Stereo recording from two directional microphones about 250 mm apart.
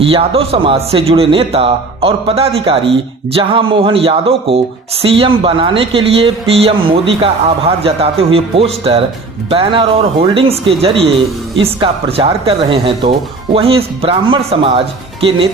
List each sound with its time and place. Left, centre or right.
0.0 s a man's voice: right